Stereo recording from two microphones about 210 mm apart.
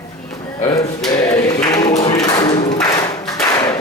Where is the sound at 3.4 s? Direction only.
20° left (ahead or behind).